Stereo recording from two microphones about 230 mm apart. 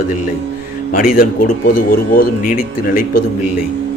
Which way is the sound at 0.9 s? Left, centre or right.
Left.